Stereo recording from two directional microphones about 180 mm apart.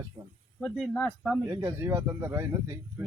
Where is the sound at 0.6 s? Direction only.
10° left (ahead or behind).